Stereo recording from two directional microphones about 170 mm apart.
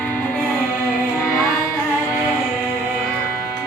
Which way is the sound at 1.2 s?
15° left (ahead or behind).